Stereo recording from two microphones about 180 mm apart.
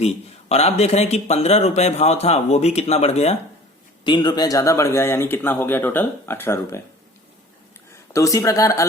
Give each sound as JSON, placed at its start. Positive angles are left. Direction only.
{"t": 0.0, "sound": "speech", "side_deg": 35}
{"t": 4.0, "sound": "speech", "side_deg": 25}
{"t": 8.1, "sound": "speech", "side_deg": 15}